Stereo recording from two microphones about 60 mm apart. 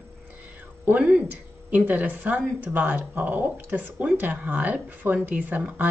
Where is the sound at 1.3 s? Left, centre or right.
Right.